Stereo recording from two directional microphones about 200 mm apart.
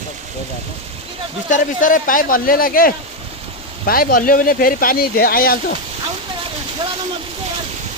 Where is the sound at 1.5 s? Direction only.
40° left (ahead or behind).